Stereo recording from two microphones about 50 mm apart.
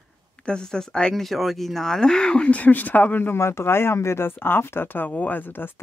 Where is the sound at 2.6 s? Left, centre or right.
Left.